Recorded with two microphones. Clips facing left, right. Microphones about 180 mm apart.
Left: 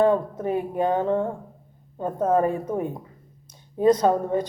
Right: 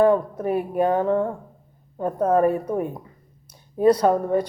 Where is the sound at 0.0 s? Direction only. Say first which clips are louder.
Right 2 dB; 25° left (ahead or behind).